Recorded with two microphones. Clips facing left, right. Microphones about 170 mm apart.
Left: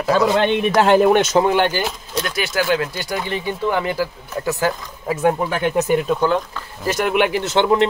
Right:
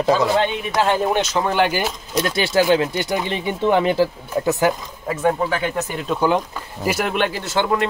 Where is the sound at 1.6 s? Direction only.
10° right (ahead or behind).